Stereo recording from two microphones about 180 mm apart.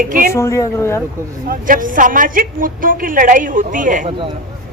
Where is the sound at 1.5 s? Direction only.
50° right (ahead or behind).